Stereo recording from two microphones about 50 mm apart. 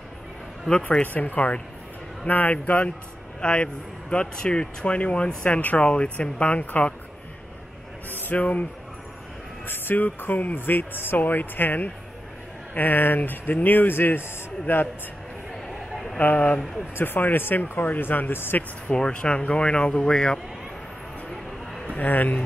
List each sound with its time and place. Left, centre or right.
0.7 s a man's voice: centre
1.0 s speech: left
8.1 s speech: left
9.7 s speech: left
16.2 s speech: left
16.9 s speech: left
18.9 s speech: centre
21.9 s speech: left